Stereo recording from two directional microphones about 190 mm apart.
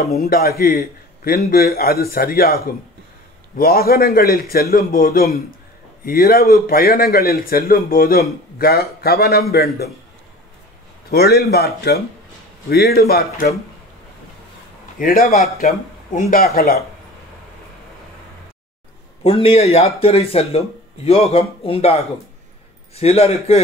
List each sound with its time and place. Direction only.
0.2 s a man's voice: 55° left (ahead or behind)
11.1 s a man's voice: 55° left (ahead or behind)
15.0 s a man's voice: 50° left (ahead or behind)
19.2 s speech: 30° left (ahead or behind)